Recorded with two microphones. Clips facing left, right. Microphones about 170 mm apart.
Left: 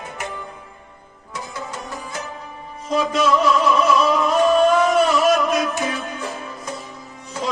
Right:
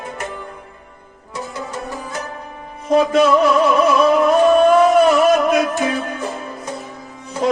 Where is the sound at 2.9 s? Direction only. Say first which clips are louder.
Right 6 dB; 55° right (ahead or behind).